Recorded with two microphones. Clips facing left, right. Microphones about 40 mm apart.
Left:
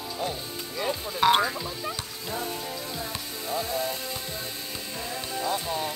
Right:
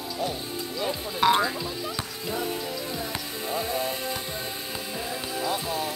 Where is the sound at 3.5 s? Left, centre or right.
Right.